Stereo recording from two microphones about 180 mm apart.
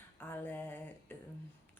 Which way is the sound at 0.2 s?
10° left (ahead or behind).